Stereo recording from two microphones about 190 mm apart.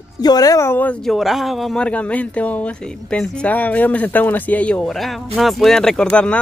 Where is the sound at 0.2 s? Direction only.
20° left (ahead or behind).